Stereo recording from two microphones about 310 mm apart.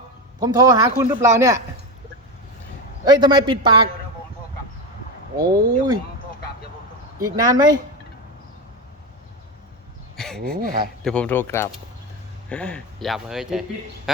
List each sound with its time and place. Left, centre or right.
0.4 s speech: centre
3.0 s speech: centre
5.4 s speech: centre
7.2 s speech: centre
10.2 s a sound: centre
10.6 s speech: right
11.0 s speech: centre